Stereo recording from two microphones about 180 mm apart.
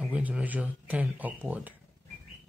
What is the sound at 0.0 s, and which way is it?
Speech, 5° right (ahead or behind).